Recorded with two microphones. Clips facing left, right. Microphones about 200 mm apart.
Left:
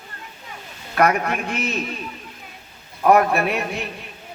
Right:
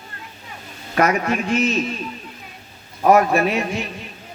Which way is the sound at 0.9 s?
55° left (ahead or behind).